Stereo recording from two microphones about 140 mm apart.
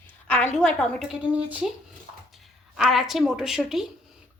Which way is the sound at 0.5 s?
5° left (ahead or behind).